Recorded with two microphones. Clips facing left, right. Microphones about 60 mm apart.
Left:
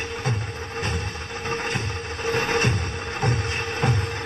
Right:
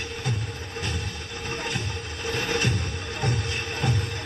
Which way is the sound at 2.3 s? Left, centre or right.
Left.